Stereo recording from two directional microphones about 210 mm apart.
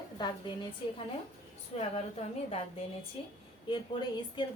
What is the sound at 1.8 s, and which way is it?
A woman's voice, 30° left (ahead or behind).